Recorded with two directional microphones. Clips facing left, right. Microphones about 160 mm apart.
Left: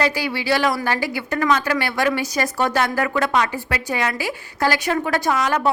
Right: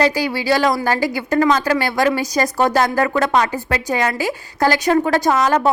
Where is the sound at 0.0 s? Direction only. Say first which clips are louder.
Right 4 dB; 40° right (ahead or behind).